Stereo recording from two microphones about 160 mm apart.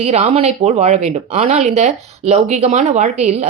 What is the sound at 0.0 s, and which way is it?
A woman's voice, 40° right (ahead or behind).